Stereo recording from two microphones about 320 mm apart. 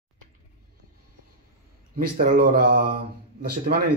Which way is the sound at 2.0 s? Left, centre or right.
Right.